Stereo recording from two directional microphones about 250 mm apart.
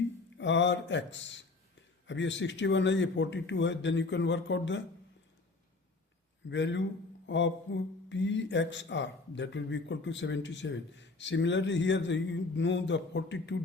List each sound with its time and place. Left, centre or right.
0.3 s speech: left
6.5 s speech: left